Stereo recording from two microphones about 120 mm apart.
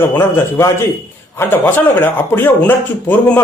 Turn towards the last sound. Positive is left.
turn(degrees=15)  # may be behind; listen again after turning